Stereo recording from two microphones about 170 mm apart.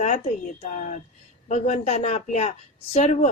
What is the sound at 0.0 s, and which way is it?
A woman's voice, 40° left (ahead or behind).